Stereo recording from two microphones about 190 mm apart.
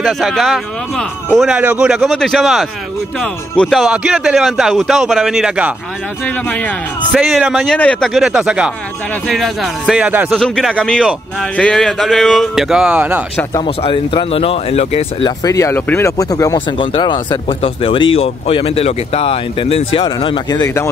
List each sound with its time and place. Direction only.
0.0 s speech: centre (ahead or behind)
13.6 s speech: 30° left (ahead or behind)
15.4 s speech: 15° left (ahead or behind)